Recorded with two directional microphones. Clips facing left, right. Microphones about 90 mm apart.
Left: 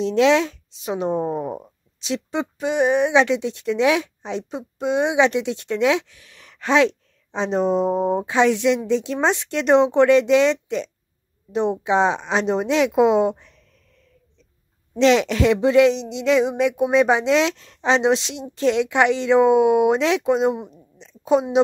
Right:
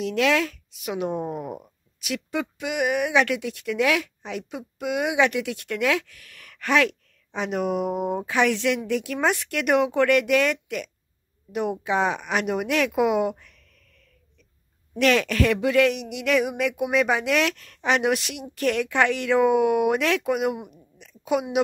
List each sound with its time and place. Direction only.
0.0 s speech: 25° left (ahead or behind)
15.0 s speech: 20° left (ahead or behind)